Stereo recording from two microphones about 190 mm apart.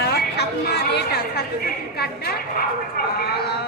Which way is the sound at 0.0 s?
60° left (ahead or behind).